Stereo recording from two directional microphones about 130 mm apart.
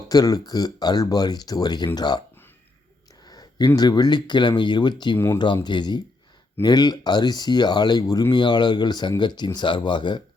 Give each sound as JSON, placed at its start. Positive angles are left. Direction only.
{"t": 0.1, "sound": "speech", "side_deg": 30}
{"t": 3.2, "sound": "a sound", "side_deg": 30}
{"t": 3.8, "sound": "speech", "side_deg": 30}
{"t": 5.1, "sound": "speech", "side_deg": 20}
{"t": 5.6, "sound": "speech", "side_deg": 35}